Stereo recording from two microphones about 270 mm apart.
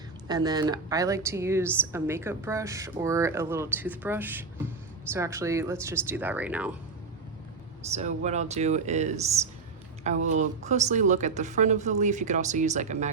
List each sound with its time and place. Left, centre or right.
0.3 s a woman's voice: centre
7.9 s speech: right
10.2 s speech: right